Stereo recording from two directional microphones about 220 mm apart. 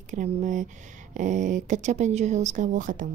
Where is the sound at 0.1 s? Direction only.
35° right (ahead or behind).